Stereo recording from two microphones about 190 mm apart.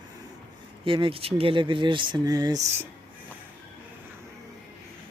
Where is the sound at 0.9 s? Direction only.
25° right (ahead or behind).